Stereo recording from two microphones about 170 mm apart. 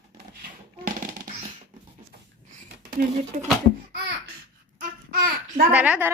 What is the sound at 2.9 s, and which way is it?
Speech, 55° right (ahead or behind).